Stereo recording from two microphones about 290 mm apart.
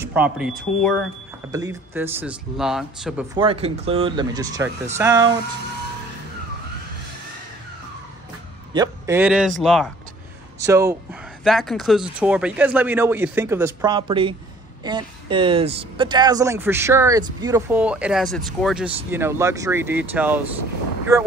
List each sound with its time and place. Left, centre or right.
0.0 s speech: centre
1.5 s speech: centre
3.3 s speech: centre
8.7 s a man's voice: centre
10.6 s speech: centre
11.4 s speech: centre